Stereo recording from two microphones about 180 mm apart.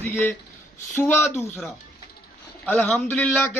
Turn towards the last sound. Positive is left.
turn(degrees=10)  # may be behind; listen again after turning